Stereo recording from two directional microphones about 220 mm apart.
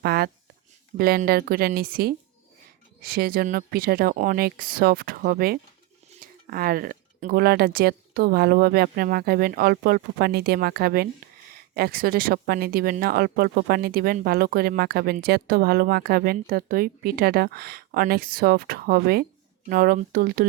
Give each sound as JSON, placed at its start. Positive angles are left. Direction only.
{"t": 0.0, "sound": "speech", "side_deg": -45}